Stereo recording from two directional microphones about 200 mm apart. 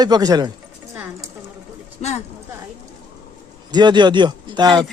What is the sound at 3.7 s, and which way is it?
Speech, 20° right (ahead or behind).